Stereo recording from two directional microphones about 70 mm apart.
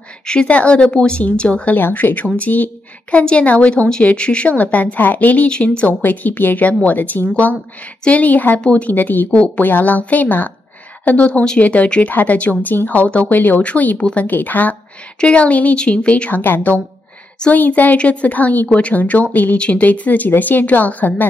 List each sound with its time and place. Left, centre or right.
0.3 s speech: centre
1.8 s a woman's voice: left